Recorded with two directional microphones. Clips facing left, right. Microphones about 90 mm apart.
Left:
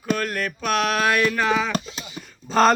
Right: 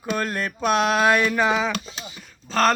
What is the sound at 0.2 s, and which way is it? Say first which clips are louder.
Speech: right 1 dB; 25° right (ahead or behind).